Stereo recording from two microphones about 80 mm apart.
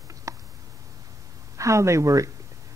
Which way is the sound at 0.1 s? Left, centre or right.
Right.